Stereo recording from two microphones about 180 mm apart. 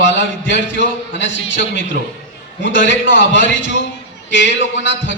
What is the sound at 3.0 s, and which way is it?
A man's voice, 90° left.